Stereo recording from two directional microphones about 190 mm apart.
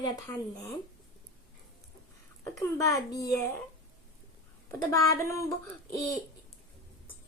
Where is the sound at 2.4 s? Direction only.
15° left (ahead or behind).